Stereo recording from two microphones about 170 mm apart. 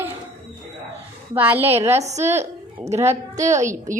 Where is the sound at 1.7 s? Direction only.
40° right (ahead or behind).